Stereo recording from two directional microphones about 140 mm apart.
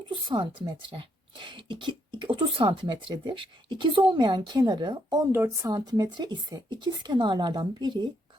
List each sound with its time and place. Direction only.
0.1 s speech: 35° right (ahead or behind)
5.3 s speech: 15° right (ahead or behind)
5.7 s speech: 30° right (ahead or behind)